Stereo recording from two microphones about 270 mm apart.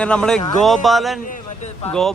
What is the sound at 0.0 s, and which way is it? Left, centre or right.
Speech, centre.